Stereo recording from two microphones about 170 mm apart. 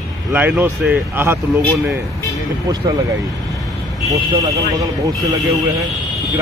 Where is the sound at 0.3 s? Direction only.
10° right (ahead or behind).